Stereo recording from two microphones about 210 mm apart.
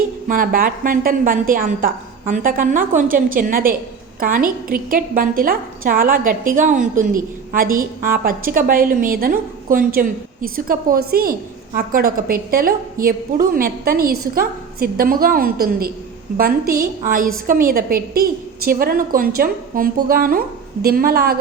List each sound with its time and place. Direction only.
0.3 s a woman's voice: 40° right (ahead or behind)